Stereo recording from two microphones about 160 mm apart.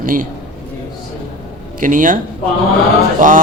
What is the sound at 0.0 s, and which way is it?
Speech, 60° right (ahead or behind).